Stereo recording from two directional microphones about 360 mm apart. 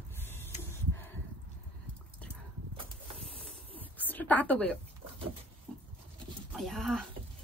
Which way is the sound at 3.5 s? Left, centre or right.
Centre.